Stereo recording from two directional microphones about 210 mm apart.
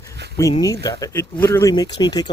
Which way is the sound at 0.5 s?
15° left (ahead or behind).